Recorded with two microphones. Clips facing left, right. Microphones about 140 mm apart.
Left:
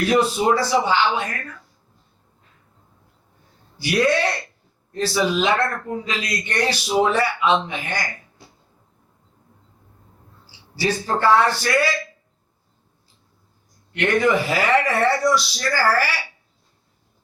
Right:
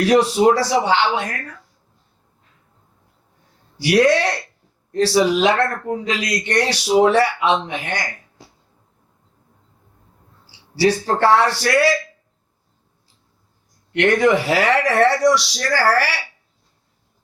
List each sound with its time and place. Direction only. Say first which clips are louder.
0.0 s speech: right 4 dB; 75° right (ahead or behind)
3.8 s speech: right 4 dB; 75° right (ahead or behind)
8.4 s a sound: right 2 dB; 90° right
10.4 s a man's voice: right 7 dB; 75° right (ahead or behind)
13.9 s speech: right 3 dB; 75° right (ahead or behind)